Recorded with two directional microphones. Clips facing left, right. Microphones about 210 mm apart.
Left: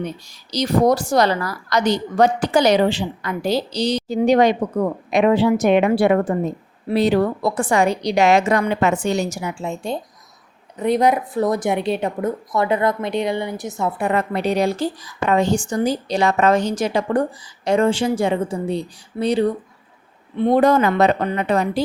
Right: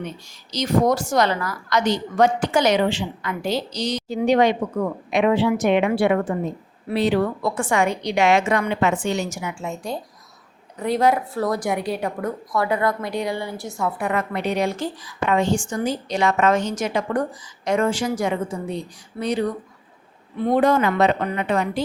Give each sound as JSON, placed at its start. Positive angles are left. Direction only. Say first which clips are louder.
{"t": 0.5, "sound": "a woman's voice", "louder": "left 3 dB", "side_deg": 35}
{"t": 20.6, "sound": "a woman's voice", "louder": "left 2 dB", "side_deg": 40}